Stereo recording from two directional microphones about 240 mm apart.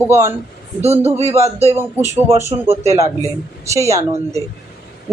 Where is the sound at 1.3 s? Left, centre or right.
Centre.